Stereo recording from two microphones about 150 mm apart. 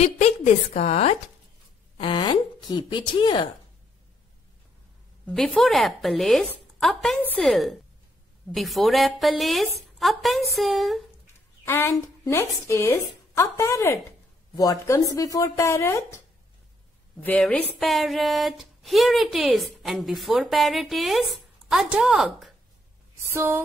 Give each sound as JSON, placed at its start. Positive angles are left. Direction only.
{"t": 0.7, "sound": "speech", "side_deg": 45}
{"t": 2.0, "sound": "speech", "side_deg": 35}
{"t": 5.2, "sound": "speech", "side_deg": 5}
{"t": 11.6, "sound": "a woman's voice", "side_deg": 15}
{"t": 17.2, "sound": "speech", "side_deg": 10}
{"t": 23.3, "sound": "speech", "side_deg": -20}